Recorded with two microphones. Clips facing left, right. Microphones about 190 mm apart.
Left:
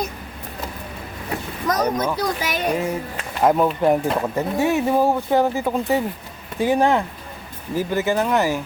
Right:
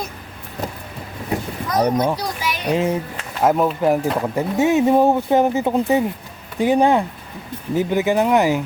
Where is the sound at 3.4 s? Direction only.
5° right (ahead or behind).